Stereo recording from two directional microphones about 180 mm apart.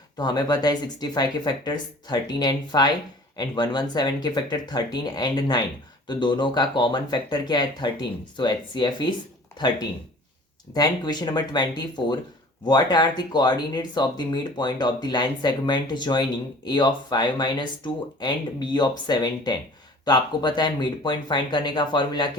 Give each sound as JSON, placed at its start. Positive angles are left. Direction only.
{"t": 0.2, "sound": "speech", "side_deg": 25}
{"t": 10.8, "sound": "speech", "side_deg": 20}